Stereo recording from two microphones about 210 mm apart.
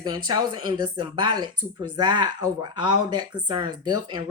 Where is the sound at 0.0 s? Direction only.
20° right (ahead or behind).